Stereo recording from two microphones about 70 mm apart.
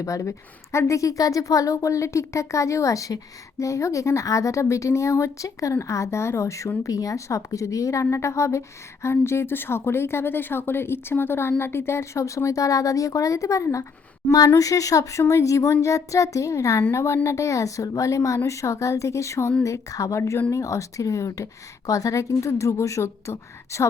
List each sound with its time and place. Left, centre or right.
0.0 s speech: left
14.3 s a woman's voice: left